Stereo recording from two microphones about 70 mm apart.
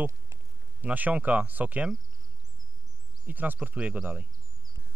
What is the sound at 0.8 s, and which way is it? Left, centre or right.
Speech, right.